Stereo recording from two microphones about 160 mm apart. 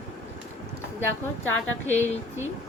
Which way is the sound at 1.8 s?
10° left (ahead or behind).